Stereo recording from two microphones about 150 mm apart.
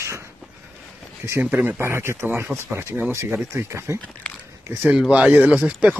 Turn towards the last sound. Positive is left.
turn(degrees=-10)  # may be behind; listen again after turning